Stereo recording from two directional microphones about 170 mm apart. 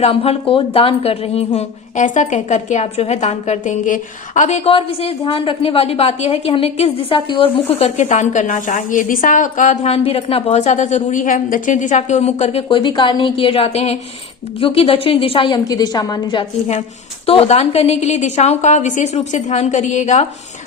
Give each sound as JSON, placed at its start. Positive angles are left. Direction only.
{"t": 0.0, "sound": "a woman's voice", "side_deg": 35}